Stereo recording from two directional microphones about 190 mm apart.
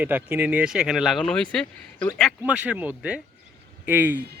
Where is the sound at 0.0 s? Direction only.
10° right (ahead or behind).